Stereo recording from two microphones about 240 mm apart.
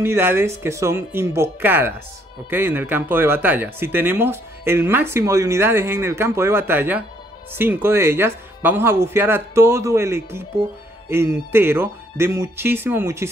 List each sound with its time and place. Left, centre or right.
0.0 s speech: centre